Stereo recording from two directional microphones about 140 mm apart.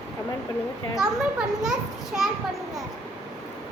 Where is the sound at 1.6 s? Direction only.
5° right (ahead or behind).